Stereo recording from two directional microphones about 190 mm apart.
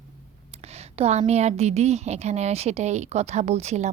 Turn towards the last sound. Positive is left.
turn(degrees=-35)  # may be behind; listen again after turning